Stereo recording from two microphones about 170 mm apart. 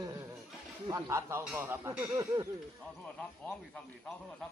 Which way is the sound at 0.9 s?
20° right (ahead or behind).